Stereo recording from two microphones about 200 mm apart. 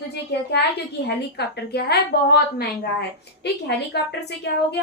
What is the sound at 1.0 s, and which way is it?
Speech, 55° left (ahead or behind).